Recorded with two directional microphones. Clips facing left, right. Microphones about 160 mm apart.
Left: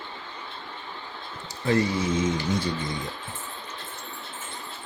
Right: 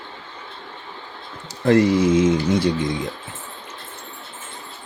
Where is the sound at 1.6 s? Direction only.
80° right.